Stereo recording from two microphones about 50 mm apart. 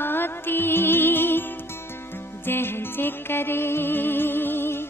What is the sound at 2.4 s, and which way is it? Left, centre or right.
Music, left.